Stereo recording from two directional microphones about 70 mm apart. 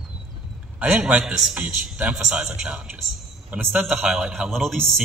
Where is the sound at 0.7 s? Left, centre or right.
Centre.